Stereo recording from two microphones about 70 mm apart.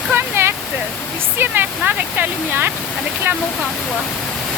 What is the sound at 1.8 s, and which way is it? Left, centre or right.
Speech, right.